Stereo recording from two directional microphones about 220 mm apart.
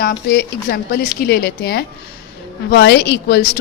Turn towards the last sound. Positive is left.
turn(degrees=45)  # may be behind; listen again after turning